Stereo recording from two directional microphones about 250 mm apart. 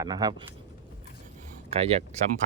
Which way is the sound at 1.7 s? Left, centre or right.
Right.